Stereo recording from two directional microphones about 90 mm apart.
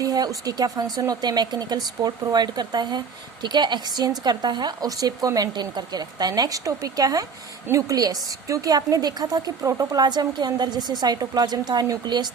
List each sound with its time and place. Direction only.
0.0 s a woman's voice: 45° right (ahead or behind)